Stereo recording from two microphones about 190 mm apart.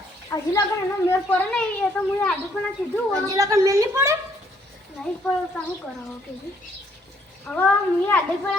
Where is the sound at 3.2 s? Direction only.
20° right (ahead or behind).